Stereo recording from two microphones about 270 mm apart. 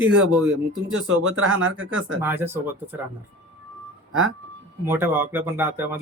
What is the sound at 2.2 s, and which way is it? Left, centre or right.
Speech, centre.